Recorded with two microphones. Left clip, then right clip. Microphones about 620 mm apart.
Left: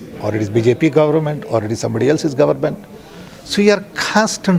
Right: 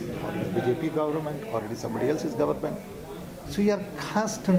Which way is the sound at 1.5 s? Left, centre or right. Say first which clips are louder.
Left 14 dB; left.